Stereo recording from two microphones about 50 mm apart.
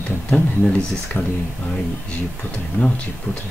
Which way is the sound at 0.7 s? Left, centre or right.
Left.